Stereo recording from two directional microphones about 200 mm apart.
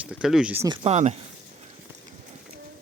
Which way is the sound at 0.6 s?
30° right (ahead or behind).